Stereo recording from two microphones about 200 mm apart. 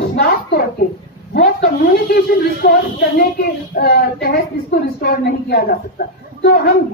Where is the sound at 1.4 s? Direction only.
50° left (ahead or behind).